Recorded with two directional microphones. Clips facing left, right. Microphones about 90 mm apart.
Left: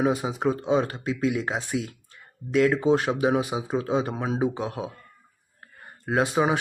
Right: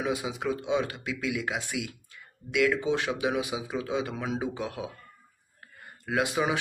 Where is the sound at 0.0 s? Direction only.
35° left (ahead or behind).